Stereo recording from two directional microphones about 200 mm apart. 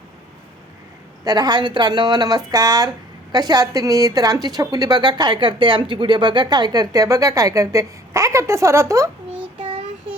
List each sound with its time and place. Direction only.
1.2 s a woman's voice: 20° right (ahead or behind)
9.6 s child singing: 30° right (ahead or behind)